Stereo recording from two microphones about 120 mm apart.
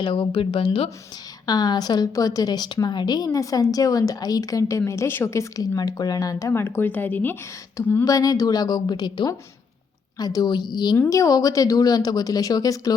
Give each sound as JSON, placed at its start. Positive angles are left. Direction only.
{"t": 0.0, "sound": "speech", "side_deg": 45}
{"t": 1.5, "sound": "a woman's voice", "side_deg": 35}
{"t": 6.5, "sound": "speech", "side_deg": 20}
{"t": 8.0, "sound": "a woman's voice", "side_deg": 30}
{"t": 10.9, "sound": "speech", "side_deg": 25}